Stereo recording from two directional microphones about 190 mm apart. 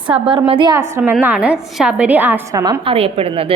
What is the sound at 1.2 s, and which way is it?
A woman's voice, 5° right (ahead or behind).